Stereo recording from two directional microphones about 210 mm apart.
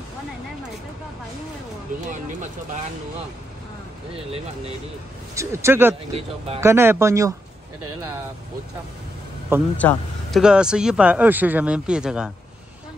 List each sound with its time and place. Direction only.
5.3 s speech: 15° right (ahead or behind)
6.1 s speech: 30° right (ahead or behind)
6.6 s speech: 10° right (ahead or behind)
9.8 s a man's voice: 5° left (ahead or behind)
10.4 s speech: 5° right (ahead or behind)